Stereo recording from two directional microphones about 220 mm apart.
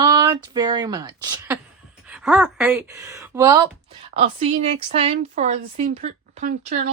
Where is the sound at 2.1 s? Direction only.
5° right (ahead or behind).